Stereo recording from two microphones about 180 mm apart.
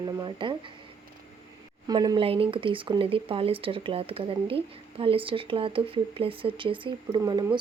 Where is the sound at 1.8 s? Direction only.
25° right (ahead or behind).